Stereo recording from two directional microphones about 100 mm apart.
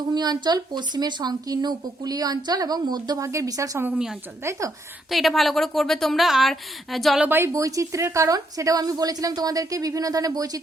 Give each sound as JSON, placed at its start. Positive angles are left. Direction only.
{"t": 0.1, "sound": "speech", "side_deg": -45}
{"t": 3.2, "sound": "a woman's voice", "side_deg": -35}
{"t": 3.8, "sound": "a woman's voice", "side_deg": -5}
{"t": 4.4, "sound": "a woman's voice", "side_deg": -30}
{"t": 5.1, "sound": "a woman's voice", "side_deg": 0}
{"t": 7.2, "sound": "a woman's voice", "side_deg": -20}
{"t": 7.5, "sound": "a woman's voice", "side_deg": -35}